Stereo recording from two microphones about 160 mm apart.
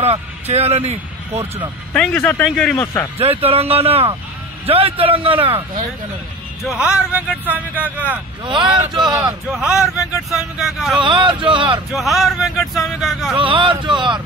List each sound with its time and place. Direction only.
0.0 s speech: 40° right (ahead or behind)
2.0 s speech: 5° left (ahead or behind)
3.2 s a man's voice: 40° right (ahead or behind)
6.6 s speech: 5° right (ahead or behind)
8.5 s speech: 30° right (ahead or behind)
9.5 s speech: 5° right (ahead or behind)
11.0 s a man's voice: 30° right (ahead or behind)
11.9 s speech: centre (ahead or behind)
13.4 s a man's voice: 35° right (ahead or behind)